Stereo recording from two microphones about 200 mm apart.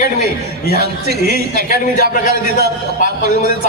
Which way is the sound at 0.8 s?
50° right (ahead or behind).